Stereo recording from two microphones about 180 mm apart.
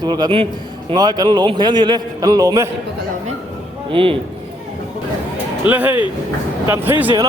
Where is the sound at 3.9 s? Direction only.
30° right (ahead or behind).